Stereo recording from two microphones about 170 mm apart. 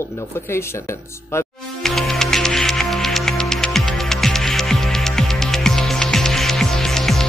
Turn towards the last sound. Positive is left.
turn(degrees=0)  # may be behind; listen again after turning